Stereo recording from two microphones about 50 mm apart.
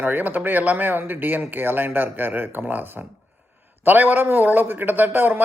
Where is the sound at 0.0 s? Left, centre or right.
Right.